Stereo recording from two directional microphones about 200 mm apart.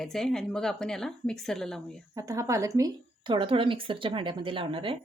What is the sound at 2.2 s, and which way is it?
A woman's voice, 15° right (ahead or behind).